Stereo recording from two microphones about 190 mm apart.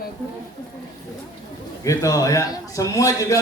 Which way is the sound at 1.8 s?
15° left (ahead or behind).